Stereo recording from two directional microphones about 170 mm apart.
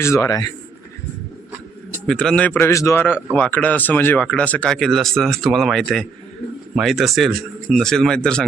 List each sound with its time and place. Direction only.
0.0 s speech: 20° left (ahead or behind)
2.0 s speech: 5° left (ahead or behind)